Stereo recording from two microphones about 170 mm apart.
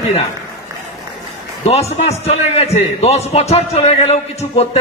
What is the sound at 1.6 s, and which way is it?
A man's voice, 40° left (ahead or behind).